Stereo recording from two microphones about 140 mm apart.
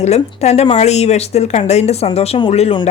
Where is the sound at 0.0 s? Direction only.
50° left (ahead or behind).